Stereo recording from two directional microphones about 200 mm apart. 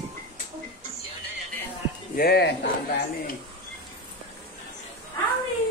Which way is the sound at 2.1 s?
50° left (ahead or behind).